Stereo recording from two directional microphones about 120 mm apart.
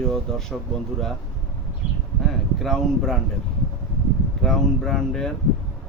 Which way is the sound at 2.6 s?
5° left (ahead or behind).